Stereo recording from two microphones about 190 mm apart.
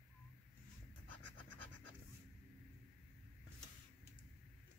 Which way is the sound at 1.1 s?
85° right.